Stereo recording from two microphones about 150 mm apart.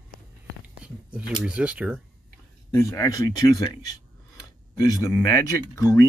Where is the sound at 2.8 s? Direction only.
20° left (ahead or behind).